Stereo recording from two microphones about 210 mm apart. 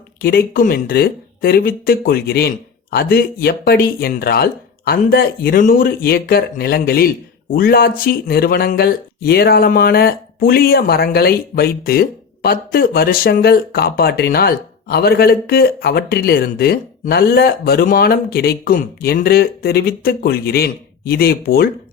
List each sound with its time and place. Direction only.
0.2 s speech: 45° left (ahead or behind)